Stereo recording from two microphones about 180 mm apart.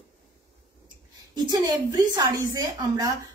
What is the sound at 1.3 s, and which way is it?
A woman's voice, 20° right (ahead or behind).